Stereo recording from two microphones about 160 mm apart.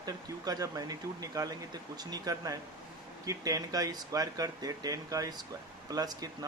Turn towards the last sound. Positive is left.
turn(degrees=-25)  # may be behind; listen again after turning